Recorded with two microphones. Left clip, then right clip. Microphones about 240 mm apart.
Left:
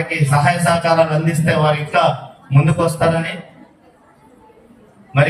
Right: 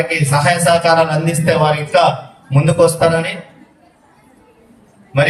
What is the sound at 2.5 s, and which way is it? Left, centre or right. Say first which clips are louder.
Speech: right 6 dB; right.